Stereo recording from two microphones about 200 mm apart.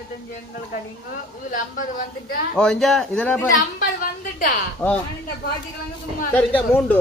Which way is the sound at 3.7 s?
45° left (ahead or behind).